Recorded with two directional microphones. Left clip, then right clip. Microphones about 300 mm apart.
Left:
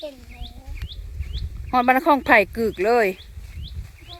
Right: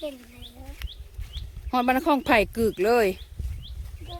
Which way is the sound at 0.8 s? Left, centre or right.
Right.